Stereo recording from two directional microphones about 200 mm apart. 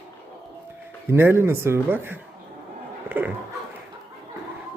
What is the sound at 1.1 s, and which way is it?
Speech, 10° right (ahead or behind).